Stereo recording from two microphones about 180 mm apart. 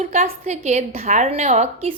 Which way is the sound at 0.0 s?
40° right (ahead or behind).